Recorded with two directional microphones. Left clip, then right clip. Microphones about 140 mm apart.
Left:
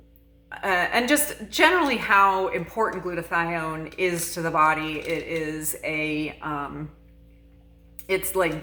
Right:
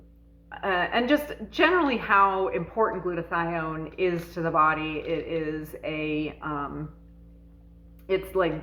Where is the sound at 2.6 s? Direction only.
25° left (ahead or behind).